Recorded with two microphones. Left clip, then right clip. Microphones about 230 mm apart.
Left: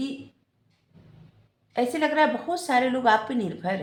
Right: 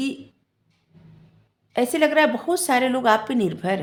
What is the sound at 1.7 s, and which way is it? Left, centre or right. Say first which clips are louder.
Speech: right 5 dB; right.